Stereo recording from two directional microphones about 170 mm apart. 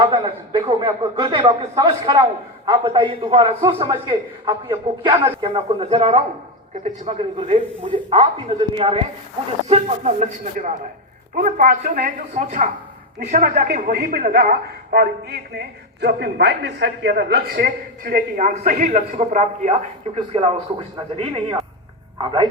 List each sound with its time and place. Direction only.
0.0 s a man's voice: 30° right (ahead or behind)
11.3 s a woman's voice: 50° right (ahead or behind); by 20.5 s 35° right (ahead or behind)
22.2 s a man's voice: 30° right (ahead or behind)